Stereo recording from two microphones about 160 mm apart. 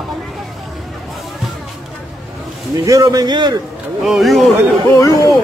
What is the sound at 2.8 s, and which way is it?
Speech, 20° right (ahead or behind).